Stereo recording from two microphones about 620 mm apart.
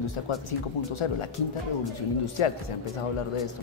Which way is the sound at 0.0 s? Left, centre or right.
Left.